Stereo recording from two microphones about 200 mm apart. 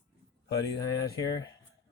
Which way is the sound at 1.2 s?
20° left (ahead or behind).